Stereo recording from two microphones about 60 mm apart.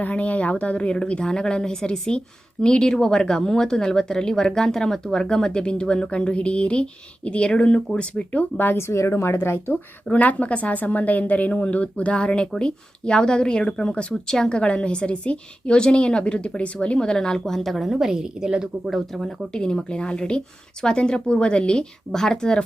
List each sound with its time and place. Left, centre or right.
0.0 s speech: left
8.8 s speech: left
9.7 s speech: left; by 17.9 s centre
17.9 s a woman's voice: centre
18.9 s speech: centre